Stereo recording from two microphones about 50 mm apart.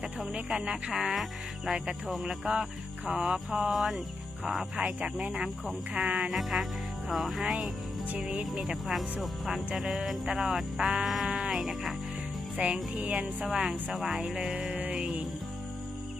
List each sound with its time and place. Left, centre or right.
0.5 s music: centre
4.8 s music: centre
6.3 s speech: centre
8.3 s music: centre
12.5 s music: right
13.2 s music: centre
13.9 s speech: centre
14.2 s music: centre